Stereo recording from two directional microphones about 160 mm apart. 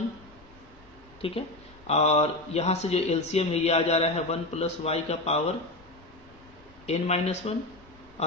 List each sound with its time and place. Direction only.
1.2 s speech: 35° left (ahead or behind)
6.8 s speech: 40° left (ahead or behind)